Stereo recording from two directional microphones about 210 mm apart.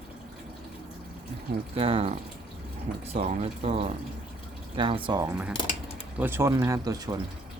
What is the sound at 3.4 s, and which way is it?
Speech, 25° right (ahead or behind).